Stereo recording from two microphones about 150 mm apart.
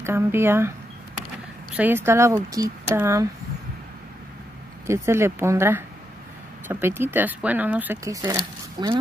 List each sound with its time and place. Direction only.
0.0 s a woman's voice: 15° right (ahead or behind)
1.8 s a woman's voice: 15° right (ahead or behind)
4.8 s a woman's voice: 20° right (ahead or behind)
8.0 s speech: 20° right (ahead or behind)